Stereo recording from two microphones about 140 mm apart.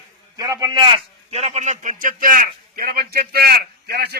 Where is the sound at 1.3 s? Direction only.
55° right (ahead or behind).